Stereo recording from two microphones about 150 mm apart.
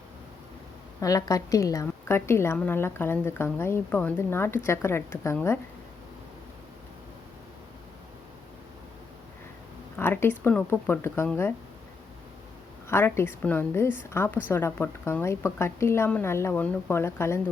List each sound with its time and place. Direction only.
1.0 s a woman's voice: 20° left (ahead or behind)
10.0 s a woman's voice: 15° left (ahead or behind)
12.9 s a woman's voice: 15° left (ahead or behind)